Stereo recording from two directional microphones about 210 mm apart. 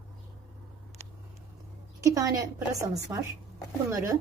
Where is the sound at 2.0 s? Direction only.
15° right (ahead or behind).